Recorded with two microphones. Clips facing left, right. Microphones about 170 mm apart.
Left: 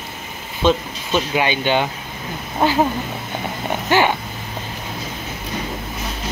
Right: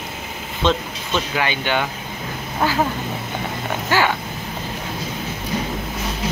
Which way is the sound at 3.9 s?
20° left (ahead or behind).